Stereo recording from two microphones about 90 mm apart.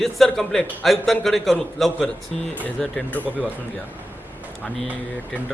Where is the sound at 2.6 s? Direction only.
15° left (ahead or behind).